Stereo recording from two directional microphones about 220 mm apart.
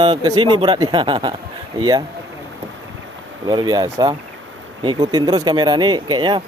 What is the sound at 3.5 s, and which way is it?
Speech, 20° right (ahead or behind).